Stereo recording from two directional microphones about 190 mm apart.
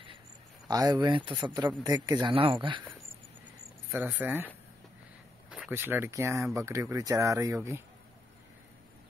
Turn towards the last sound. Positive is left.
turn(degrees=-15)  # may be behind; listen again after turning